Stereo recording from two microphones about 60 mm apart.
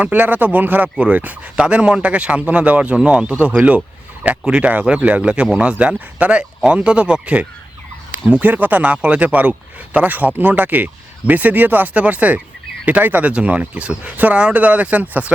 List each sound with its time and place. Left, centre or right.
0.0 s speech: right